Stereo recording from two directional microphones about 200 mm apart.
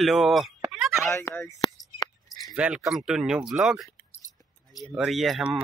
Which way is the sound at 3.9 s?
10° left (ahead or behind).